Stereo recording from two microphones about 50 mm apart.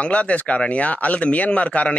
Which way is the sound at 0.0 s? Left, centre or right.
Left.